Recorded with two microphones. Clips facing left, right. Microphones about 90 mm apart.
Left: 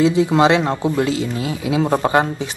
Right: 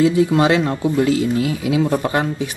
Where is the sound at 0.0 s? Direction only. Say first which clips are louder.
Even; 20° left (ahead or behind).